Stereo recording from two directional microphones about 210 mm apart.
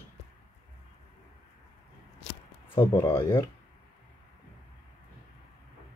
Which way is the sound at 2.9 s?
10° left (ahead or behind).